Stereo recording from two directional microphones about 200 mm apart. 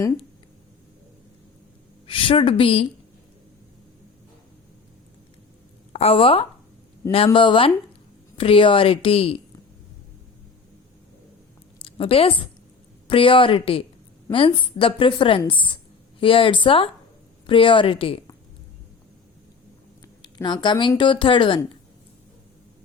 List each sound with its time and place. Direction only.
2.0 s a woman's voice: 25° left (ahead or behind)
5.9 s a woman's voice: 30° left (ahead or behind)
11.8 s a woman's voice: 25° left (ahead or behind)
20.2 s a woman's voice: 20° left (ahead or behind)